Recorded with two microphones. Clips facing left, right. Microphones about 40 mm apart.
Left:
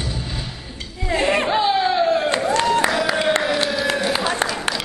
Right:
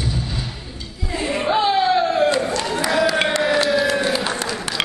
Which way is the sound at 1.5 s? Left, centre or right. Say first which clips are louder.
Right 1 dB; centre.